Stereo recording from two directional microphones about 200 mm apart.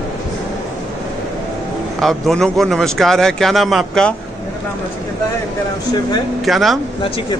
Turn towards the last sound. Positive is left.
turn(degrees=0)  # may be behind; listen again after turning